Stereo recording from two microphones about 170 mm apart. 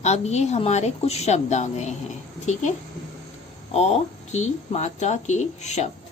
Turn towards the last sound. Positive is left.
turn(degrees=40)  # may be behind; listen again after turning